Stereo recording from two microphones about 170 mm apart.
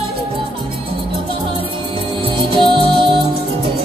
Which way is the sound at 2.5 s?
30° right (ahead or behind).